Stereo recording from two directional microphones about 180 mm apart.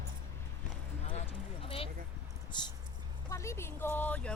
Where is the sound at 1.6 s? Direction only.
30° left (ahead or behind).